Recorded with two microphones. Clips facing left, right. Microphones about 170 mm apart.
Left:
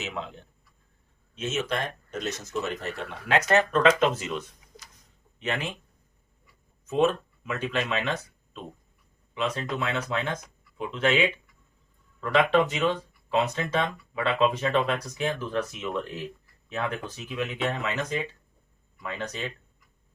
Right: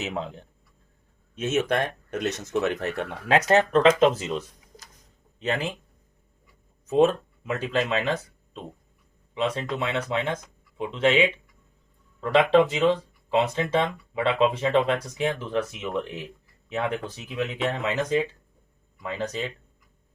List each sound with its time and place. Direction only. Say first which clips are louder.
1.4 s speech: right 5 dB; 55° right (ahead or behind)
3.2 s speech: right 3 dB; 35° right (ahead or behind)
6.8 s speech: right 4 dB; 40° right (ahead or behind)
9.3 s speech: right 2 dB; 25° right (ahead or behind)
12.2 s speech: right 3 dB; 25° right (ahead or behind)